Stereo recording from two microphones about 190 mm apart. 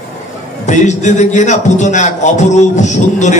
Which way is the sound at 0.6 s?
40° left (ahead or behind).